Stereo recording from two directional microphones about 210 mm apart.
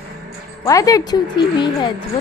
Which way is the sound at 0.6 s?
15° left (ahead or behind).